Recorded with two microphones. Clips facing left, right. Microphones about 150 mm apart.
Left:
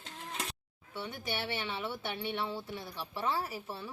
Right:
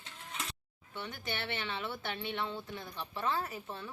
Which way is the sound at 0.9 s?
10° left (ahead or behind).